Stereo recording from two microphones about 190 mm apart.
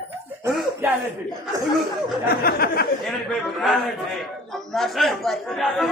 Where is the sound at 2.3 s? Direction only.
55° left (ahead or behind).